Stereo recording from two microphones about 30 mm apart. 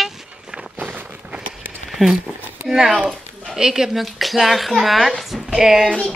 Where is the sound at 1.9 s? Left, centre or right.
Centre.